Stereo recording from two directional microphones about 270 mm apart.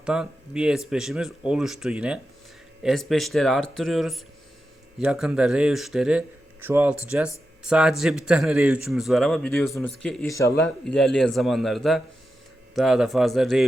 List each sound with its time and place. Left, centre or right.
0.0 s speech: centre